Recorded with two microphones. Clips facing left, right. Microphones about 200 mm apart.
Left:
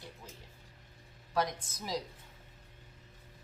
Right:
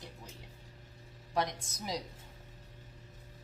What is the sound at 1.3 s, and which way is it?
Speech, 20° right (ahead or behind).